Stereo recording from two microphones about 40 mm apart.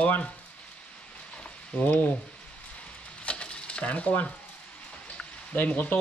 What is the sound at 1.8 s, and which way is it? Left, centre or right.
Speech, left.